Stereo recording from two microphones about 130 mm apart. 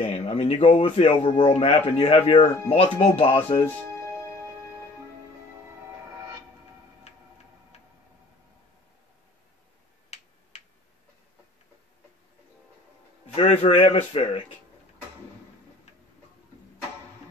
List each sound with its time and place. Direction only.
0.0 s a man's voice: 55° left (ahead or behind)
7.1 s tick-tock: 60° left (ahead or behind)
10.5 s tick-tock: 60° left (ahead or behind)
13.3 s a man's voice: 50° left (ahead or behind)